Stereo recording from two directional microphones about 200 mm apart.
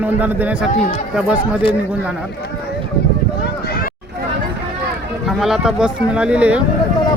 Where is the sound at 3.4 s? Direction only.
50° left (ahead or behind).